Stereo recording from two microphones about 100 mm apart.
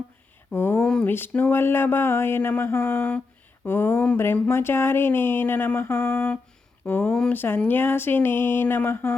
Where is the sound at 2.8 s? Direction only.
10° left (ahead or behind).